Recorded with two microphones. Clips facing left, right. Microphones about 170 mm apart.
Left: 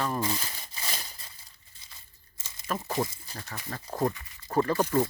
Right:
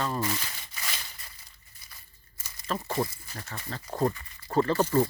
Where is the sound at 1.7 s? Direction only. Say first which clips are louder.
Right 1 dB; 25° left (ahead or behind).